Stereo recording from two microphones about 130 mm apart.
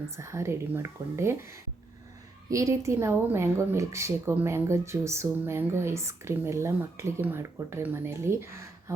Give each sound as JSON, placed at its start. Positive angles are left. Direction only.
{"t": 0.2, "sound": "a woman's voice", "side_deg": -20}
{"t": 2.5, "sound": "a woman's voice", "side_deg": -25}